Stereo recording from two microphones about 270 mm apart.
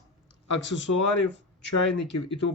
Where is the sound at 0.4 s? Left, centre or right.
Left.